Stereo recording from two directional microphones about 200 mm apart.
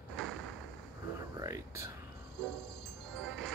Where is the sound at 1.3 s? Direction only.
15° right (ahead or behind).